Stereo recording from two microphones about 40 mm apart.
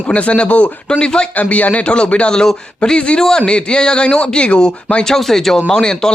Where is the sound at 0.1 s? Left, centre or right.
Left.